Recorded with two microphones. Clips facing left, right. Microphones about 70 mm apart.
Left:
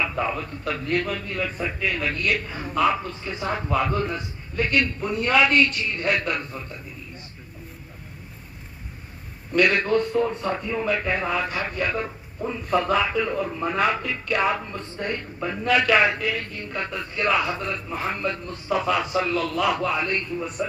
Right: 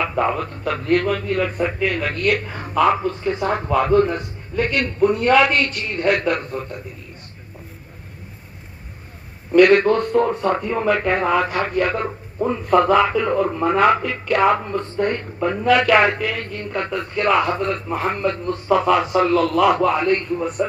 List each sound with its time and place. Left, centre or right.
0.0 s speech: right
9.6 s speech: right